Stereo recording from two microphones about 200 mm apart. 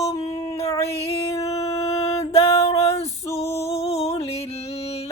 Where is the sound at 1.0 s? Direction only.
30° left (ahead or behind).